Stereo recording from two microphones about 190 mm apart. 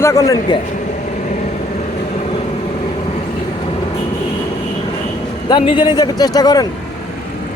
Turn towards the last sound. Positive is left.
turn(degrees=20)  # may be behind; listen again after turning